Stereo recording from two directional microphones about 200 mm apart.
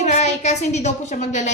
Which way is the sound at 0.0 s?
35° left (ahead or behind).